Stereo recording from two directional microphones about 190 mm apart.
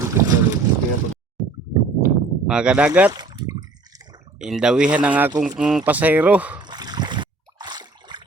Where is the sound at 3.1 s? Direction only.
20° right (ahead or behind).